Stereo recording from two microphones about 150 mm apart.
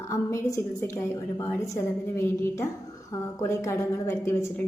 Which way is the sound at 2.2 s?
20° left (ahead or behind).